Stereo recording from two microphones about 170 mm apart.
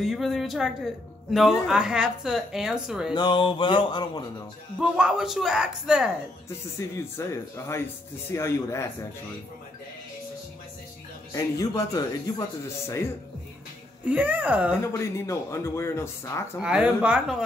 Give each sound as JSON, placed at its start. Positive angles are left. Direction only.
{"t": 0.0, "sound": "a woman's voice", "side_deg": 0}
{"t": 3.2, "sound": "speech", "side_deg": 25}
{"t": 4.7, "sound": "a woman's voice", "side_deg": -5}
{"t": 6.8, "sound": "speech", "side_deg": 20}
{"t": 11.3, "sound": "speech", "side_deg": 20}
{"t": 14.0, "sound": "speech", "side_deg": -10}
{"t": 14.8, "sound": "speech", "side_deg": 15}
{"t": 16.5, "sound": "a woman's voice", "side_deg": -5}